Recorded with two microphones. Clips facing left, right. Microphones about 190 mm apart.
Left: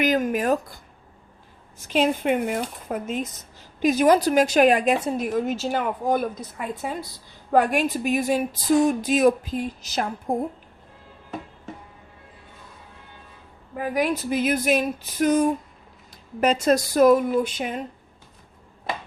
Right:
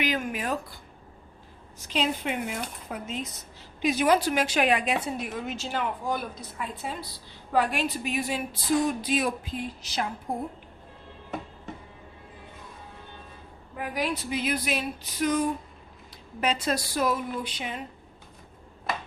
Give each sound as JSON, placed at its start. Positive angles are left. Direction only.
{"t": 0.0, "sound": "speech", "side_deg": 40}
{"t": 1.9, "sound": "speech", "side_deg": 50}
{"t": 13.8, "sound": "speech", "side_deg": 50}